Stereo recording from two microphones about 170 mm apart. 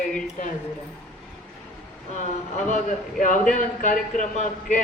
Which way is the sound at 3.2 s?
50° left (ahead or behind).